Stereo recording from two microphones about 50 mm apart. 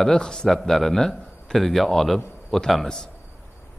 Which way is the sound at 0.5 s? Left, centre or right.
Centre.